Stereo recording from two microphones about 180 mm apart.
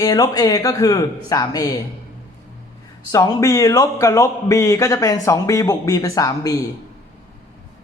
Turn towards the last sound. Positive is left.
turn(degrees=20)  # may be behind; listen again after turning